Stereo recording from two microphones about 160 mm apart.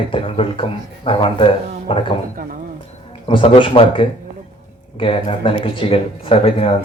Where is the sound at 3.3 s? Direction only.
35° left (ahead or behind).